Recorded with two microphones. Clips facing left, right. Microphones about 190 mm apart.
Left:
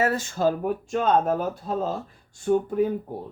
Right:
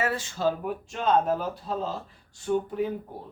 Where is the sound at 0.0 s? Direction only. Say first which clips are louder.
Left 4 dB; 45° left (ahead or behind).